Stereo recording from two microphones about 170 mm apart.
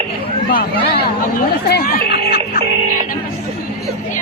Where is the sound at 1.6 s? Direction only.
65° left (ahead or behind).